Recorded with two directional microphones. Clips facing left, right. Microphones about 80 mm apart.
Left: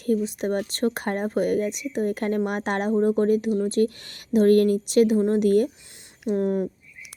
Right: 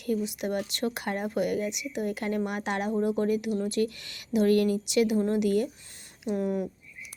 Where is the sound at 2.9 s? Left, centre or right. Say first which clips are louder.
Left 7 dB; left.